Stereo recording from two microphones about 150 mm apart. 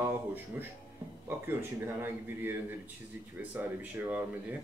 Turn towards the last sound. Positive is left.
turn(degrees=-10)  # may be behind; listen again after turning